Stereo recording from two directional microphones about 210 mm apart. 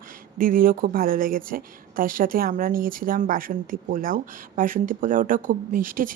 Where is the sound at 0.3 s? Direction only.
40° right (ahead or behind).